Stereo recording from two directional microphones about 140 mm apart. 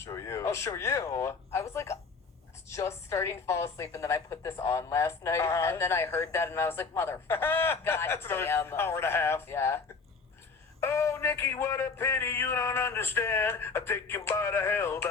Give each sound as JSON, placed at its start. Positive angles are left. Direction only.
{"t": 0.0, "sound": "a woman's voice", "side_deg": 20}